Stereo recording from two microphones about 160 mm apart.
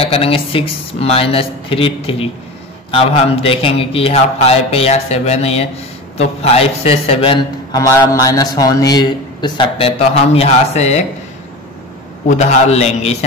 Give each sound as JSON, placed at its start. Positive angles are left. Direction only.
{"t": 0.0, "sound": "a man's voice", "side_deg": 35}
{"t": 7.7, "sound": "a man's voice", "side_deg": 20}
{"t": 12.3, "sound": "a man's voice", "side_deg": 45}